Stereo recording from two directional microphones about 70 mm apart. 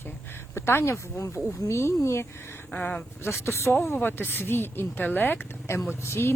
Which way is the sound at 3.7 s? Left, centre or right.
Left.